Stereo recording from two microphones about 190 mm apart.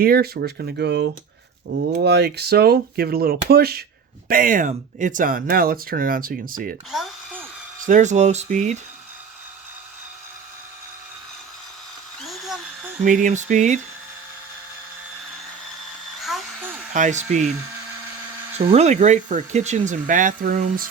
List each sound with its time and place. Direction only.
0.0 s speech: 55° right (ahead or behind)
6.9 s a sound: 5° right (ahead or behind)
7.9 s speech: 40° right (ahead or behind)
12.2 s a sound: centre (ahead or behind)
13.1 s speech: 40° right (ahead or behind)
16.2 s hair dryer: centre (ahead or behind)
16.9 s speech: 40° right (ahead or behind)
18.7 s speech: 35° right (ahead or behind)